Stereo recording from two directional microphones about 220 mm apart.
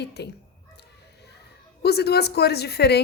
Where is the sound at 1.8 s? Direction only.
45° left (ahead or behind).